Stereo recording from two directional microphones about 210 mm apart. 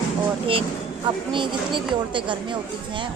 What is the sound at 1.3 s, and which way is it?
Speech, 25° right (ahead or behind).